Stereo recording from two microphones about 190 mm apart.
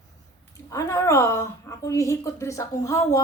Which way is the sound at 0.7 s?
15° left (ahead or behind).